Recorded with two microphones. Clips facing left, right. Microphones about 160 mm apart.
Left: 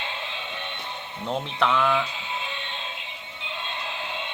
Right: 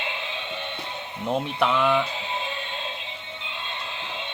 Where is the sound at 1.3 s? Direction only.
10° right (ahead or behind).